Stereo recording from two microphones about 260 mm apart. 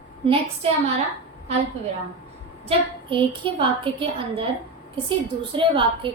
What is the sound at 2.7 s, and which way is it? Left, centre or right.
A woman's voice, centre.